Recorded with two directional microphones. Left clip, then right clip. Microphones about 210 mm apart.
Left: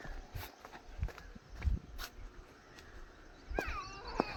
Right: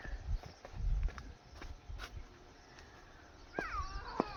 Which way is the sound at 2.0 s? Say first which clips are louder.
Left 2 dB; 15° left (ahead or behind).